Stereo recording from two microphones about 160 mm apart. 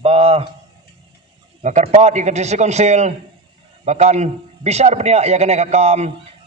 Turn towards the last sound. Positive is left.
turn(degrees=-45)  # may be behind; listen again after turning